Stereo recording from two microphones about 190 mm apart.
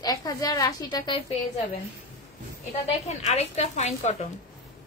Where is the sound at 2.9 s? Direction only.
35° left (ahead or behind).